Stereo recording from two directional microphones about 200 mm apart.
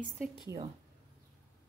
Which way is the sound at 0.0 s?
Centre (ahead or behind).